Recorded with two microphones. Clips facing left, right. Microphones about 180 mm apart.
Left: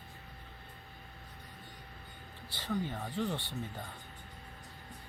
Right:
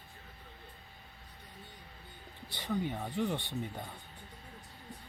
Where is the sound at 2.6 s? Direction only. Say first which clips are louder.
Right 1 dB; 20° right (ahead or behind).